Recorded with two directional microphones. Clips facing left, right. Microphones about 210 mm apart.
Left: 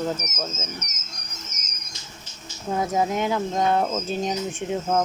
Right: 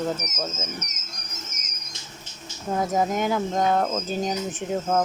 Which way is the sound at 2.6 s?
Centre (ahead or behind).